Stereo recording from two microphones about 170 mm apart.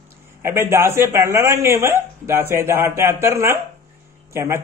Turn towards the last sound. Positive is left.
turn(degrees=-15)  # may be behind; listen again after turning